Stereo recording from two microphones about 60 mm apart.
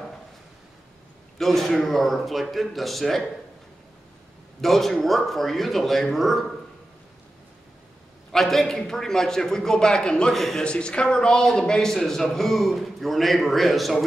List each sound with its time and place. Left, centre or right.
1.4 s a man's voice: centre
4.6 s a man's voice: centre
8.3 s a man's voice: centre
10.3 s a man's voice: centre
10.6 s a man's voice: centre